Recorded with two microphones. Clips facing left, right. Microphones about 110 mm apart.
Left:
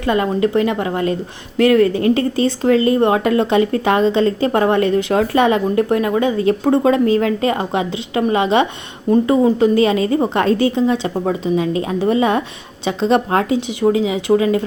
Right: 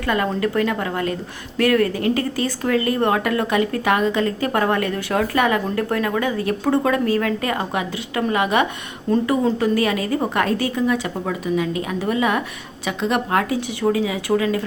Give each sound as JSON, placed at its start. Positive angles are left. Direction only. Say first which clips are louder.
{"t": 0.0, "sound": "speech", "louder": "left 4 dB", "side_deg": 25}